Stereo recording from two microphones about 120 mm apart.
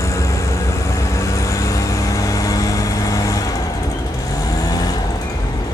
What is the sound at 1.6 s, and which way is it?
Vehicle, 30° left (ahead or behind).